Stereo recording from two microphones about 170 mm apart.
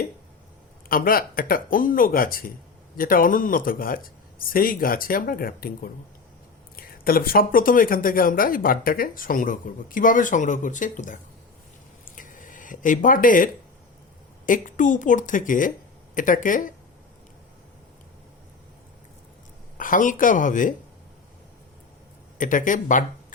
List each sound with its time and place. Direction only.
0.9 s speech: 55° left (ahead or behind)
12.1 s a sound: 50° left (ahead or behind)
14.4 s speech: 50° left (ahead or behind)
19.7 s speech: 50° left (ahead or behind)
22.4 s speech: 50° left (ahead or behind)